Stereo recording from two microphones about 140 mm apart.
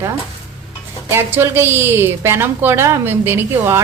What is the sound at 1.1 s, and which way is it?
A woman's voice, 15° right (ahead or behind).